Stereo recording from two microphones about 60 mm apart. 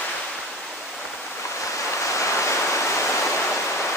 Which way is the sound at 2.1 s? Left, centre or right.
Left.